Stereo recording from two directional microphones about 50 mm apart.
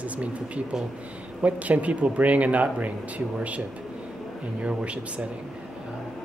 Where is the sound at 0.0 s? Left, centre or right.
Right.